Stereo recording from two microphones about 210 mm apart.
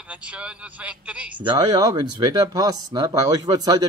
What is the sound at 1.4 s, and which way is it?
Speech, 20° right (ahead or behind).